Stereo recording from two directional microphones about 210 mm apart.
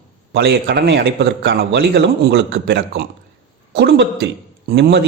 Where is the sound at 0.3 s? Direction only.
50° right (ahead or behind).